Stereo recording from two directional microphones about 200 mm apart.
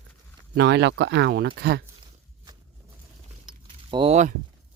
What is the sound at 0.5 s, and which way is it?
Speech, 60° right (ahead or behind).